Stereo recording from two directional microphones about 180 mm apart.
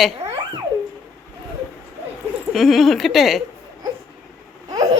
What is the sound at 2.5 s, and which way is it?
Speech, centre (ahead or behind).